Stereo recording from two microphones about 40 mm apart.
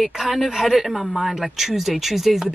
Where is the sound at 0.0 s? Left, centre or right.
Centre.